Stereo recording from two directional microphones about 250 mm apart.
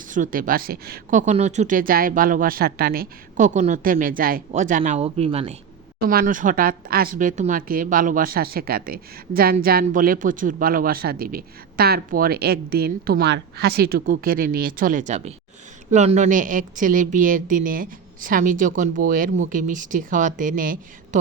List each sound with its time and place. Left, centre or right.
0.1 s speech: right
6.0 s speech: right